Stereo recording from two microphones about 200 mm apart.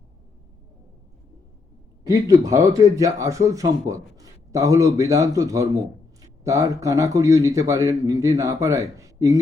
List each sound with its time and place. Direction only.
2.5 s a man's voice: 15° right (ahead or behind)